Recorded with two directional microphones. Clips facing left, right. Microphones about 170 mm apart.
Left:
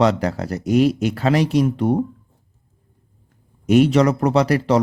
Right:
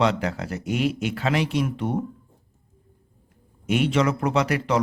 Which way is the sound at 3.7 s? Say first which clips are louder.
Left 7 dB; 40° left (ahead or behind).